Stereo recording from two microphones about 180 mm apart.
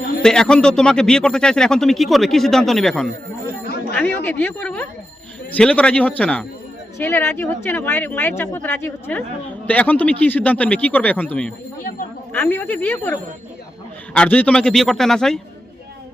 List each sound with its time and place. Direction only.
0.2 s speech: 5° left (ahead or behind)
11.8 s speech: 50° left (ahead or behind)
12.3 s speech: 10° left (ahead or behind)